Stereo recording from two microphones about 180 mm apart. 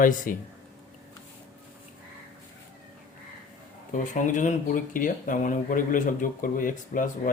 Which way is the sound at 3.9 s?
45° left (ahead or behind).